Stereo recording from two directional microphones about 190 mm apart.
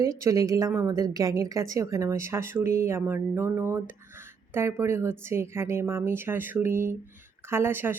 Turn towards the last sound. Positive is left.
turn(degrees=-10)  # may be behind; listen again after turning